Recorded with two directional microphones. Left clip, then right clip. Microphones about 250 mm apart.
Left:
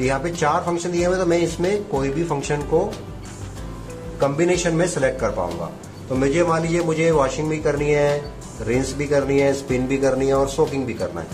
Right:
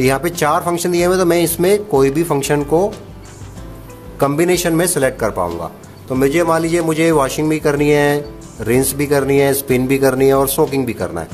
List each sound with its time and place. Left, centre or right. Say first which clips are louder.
0.0 s speech: right 5 dB; right
4.2 s a man's voice: right 4 dB; right